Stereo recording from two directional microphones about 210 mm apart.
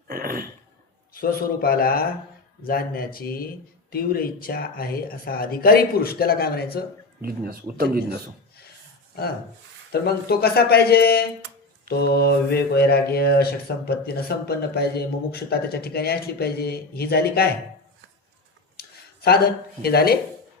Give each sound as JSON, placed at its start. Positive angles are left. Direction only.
{"t": 0.1, "sound": "throat clearing", "side_deg": -45}
{"t": 1.1, "sound": "speech", "side_deg": 45}
{"t": 7.2, "sound": "speech", "side_deg": -45}
{"t": 9.9, "sound": "speech", "side_deg": 50}
{"t": 18.8, "sound": "speech", "side_deg": 50}